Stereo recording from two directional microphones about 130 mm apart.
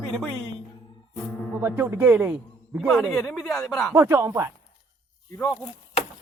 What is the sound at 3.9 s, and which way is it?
Speech, 20° right (ahead or behind).